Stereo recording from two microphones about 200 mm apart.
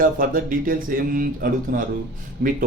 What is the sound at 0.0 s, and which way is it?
Speech, 45° right (ahead or behind).